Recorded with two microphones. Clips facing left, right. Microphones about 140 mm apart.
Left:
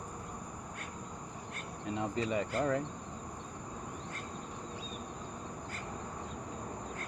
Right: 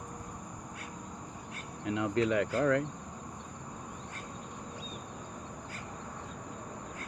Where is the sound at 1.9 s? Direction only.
90° right.